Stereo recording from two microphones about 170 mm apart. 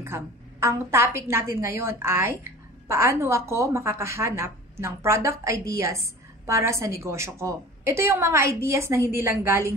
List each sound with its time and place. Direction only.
0.0 s a woman's voice: 15° right (ahead or behind)